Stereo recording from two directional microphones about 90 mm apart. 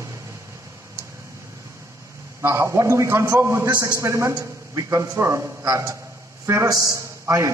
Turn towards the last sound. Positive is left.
turn(degrees=-35)  # may be behind; listen again after turning